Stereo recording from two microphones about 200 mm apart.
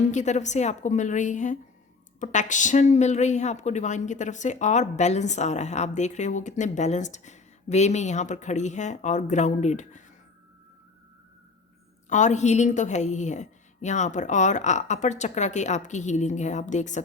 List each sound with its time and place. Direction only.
0.1 s speech: 35° left (ahead or behind)
12.0 s speech: 35° left (ahead or behind)